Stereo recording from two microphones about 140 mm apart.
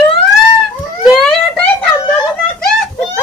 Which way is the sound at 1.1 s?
Centre (ahead or behind).